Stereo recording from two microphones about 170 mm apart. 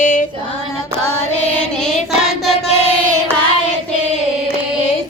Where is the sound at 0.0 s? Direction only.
50° left (ahead or behind).